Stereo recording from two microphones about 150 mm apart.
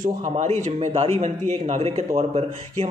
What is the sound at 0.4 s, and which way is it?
A man's voice, 45° right (ahead or behind).